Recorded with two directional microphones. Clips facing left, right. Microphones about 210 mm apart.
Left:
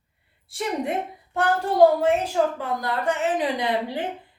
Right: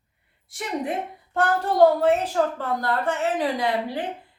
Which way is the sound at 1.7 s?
10° left (ahead or behind).